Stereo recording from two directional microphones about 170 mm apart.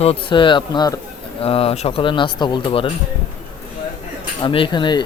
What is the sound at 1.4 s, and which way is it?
Speech, 35° left (ahead or behind).